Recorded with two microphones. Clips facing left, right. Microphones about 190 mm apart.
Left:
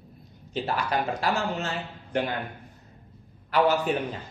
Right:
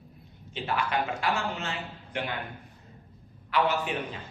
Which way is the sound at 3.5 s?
40° left (ahead or behind).